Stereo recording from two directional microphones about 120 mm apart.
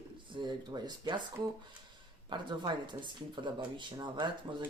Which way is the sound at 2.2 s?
40° right (ahead or behind).